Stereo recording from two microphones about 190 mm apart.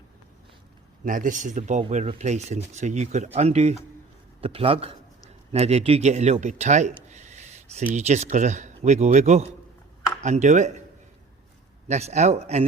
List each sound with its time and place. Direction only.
1.0 s a man's voice: 45° right (ahead or behind)
11.9 s a man's voice: 35° right (ahead or behind)